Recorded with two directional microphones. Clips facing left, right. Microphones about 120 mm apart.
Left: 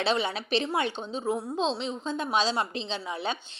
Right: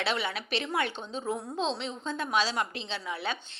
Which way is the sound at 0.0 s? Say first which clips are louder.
Left 4 dB; 25° left (ahead or behind).